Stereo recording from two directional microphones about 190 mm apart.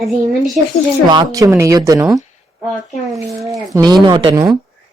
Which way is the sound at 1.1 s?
20° right (ahead or behind).